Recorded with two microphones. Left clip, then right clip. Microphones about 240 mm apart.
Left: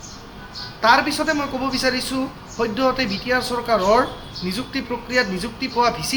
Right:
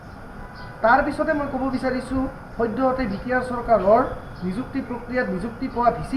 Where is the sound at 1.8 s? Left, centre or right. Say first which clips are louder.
Left 3 dB; left.